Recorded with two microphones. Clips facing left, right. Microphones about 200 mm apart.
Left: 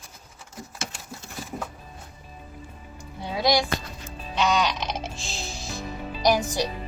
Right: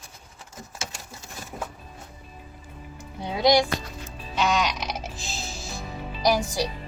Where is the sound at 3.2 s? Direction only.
20° right (ahead or behind).